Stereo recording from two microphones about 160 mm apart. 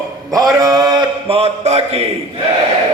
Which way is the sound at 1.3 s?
40° right (ahead or behind).